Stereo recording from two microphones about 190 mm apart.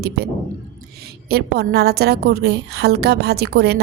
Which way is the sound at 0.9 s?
55° right (ahead or behind).